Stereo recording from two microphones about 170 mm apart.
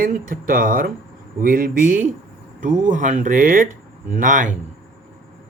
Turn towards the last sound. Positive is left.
turn(degrees=-50)  # may be behind; listen again after turning